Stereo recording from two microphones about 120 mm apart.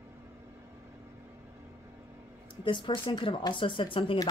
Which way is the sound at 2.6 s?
45° left (ahead or behind).